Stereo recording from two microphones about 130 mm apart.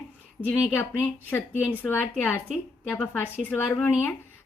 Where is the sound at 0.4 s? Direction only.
15° left (ahead or behind).